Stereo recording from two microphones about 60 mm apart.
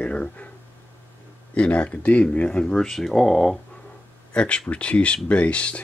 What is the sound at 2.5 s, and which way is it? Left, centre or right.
Speech, centre.